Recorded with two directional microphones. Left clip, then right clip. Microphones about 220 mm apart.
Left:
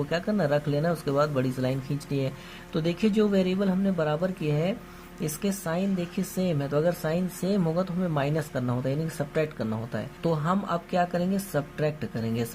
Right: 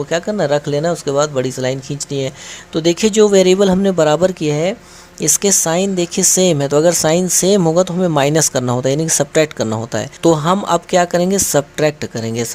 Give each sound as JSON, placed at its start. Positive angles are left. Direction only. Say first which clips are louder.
{"t": 0.1, "sound": "speech", "louder": "right 11 dB", "side_deg": -20}